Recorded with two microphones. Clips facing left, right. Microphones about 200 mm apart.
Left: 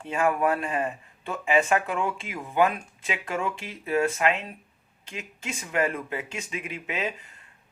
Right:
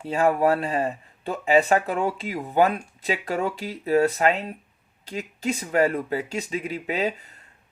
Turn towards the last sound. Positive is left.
turn(degrees=-35)  # may be behind; listen again after turning